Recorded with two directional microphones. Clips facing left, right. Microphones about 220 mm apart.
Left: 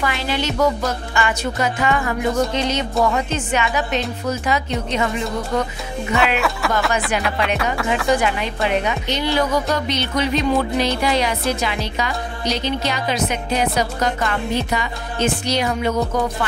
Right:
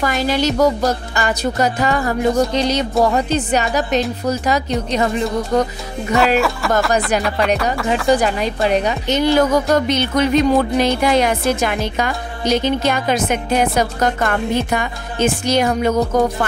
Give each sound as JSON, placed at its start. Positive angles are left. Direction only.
{"t": 0.0, "sound": "music", "side_deg": -40}
{"t": 6.1, "sound": "speech", "side_deg": 0}
{"t": 7.2, "sound": "music", "side_deg": 0}
{"t": 8.1, "sound": "a woman's voice", "side_deg": -40}